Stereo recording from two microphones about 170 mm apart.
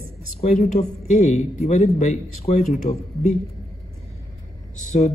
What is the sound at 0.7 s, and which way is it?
A man's voice, 45° left (ahead or behind).